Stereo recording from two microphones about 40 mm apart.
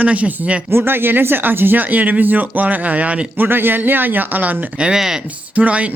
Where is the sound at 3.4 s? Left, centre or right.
Right.